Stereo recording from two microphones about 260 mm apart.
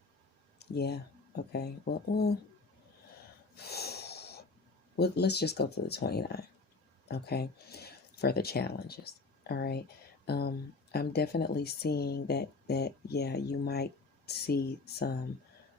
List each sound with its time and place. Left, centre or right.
0.6 s speech: left
3.5 s snort: left
4.9 s speech: left